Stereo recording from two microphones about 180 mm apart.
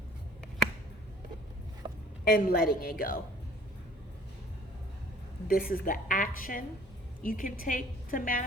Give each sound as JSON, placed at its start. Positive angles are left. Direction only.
{"t": 1.8, "sound": "a sound", "side_deg": -25}
{"t": 2.2, "sound": "a woman's voice", "side_deg": 50}
{"t": 5.5, "sound": "a woman's voice", "side_deg": 50}